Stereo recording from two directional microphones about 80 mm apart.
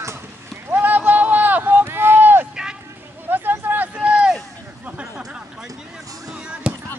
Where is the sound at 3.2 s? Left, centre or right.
Right.